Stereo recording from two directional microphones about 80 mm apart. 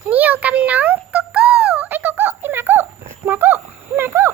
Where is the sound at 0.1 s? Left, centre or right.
Right.